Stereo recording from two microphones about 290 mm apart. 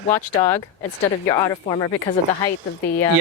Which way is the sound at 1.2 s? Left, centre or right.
Centre.